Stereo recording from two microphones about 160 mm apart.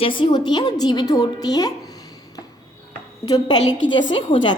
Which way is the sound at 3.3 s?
30° left (ahead or behind).